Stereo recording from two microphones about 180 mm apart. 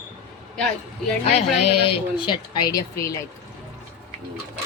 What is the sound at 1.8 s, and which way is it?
A woman's voice, 25° left (ahead or behind).